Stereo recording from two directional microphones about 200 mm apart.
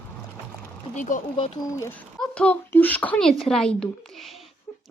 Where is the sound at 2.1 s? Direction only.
5° left (ahead or behind).